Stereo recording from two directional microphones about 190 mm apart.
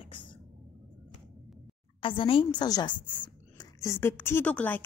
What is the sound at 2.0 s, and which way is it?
A woman's voice, 25° left (ahead or behind).